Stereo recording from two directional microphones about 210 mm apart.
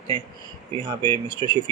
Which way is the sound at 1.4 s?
25° right (ahead or behind).